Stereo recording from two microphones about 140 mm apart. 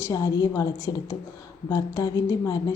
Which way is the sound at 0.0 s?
25° left (ahead or behind).